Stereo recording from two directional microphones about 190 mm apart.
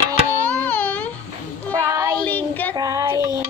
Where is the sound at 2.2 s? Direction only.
10° left (ahead or behind).